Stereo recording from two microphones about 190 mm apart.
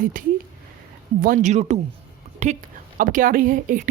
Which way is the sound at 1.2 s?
40° right (ahead or behind).